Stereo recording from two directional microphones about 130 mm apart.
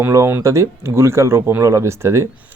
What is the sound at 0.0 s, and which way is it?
Speech, 20° right (ahead or behind).